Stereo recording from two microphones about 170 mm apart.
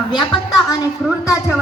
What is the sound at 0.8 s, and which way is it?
Speech, 10° right (ahead or behind).